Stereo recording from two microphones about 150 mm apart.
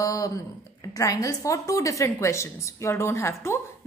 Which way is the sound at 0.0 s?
25° left (ahead or behind).